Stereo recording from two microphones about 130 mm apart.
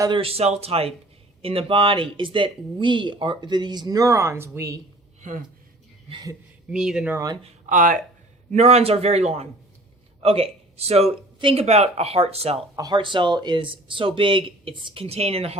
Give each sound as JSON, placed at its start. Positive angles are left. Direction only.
{"t": 0.2, "sound": "a man's voice", "side_deg": -50}
{"t": 5.2, "sound": "speech", "side_deg": -70}
{"t": 6.7, "sound": "speech", "side_deg": -5}
{"t": 7.7, "sound": "speech", "side_deg": -80}
{"t": 8.5, "sound": "a man's voice", "side_deg": -55}
{"t": 11.3, "sound": "speech", "side_deg": -40}
{"t": 11.6, "sound": "a man's voice", "side_deg": -55}
{"t": 12.7, "sound": "speech", "side_deg": -30}